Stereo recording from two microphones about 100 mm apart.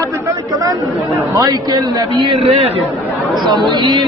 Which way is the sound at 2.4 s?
90° right.